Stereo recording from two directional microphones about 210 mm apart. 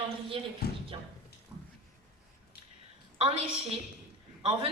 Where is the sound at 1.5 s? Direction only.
5° right (ahead or behind).